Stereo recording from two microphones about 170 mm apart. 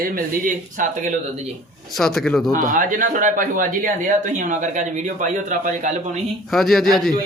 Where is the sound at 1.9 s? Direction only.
Centre (ahead or behind).